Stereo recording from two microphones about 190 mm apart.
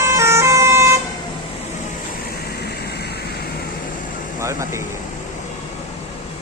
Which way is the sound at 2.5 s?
55° left (ahead or behind).